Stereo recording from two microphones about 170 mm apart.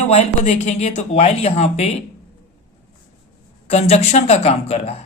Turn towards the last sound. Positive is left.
turn(degrees=40)  # may be behind; listen again after turning